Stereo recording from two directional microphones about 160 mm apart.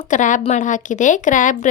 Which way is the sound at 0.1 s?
50° left (ahead or behind).